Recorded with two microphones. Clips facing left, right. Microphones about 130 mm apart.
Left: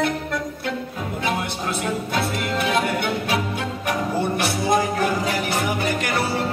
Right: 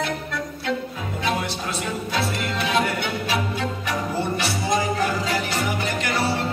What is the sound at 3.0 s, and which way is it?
Music, 50° left (ahead or behind).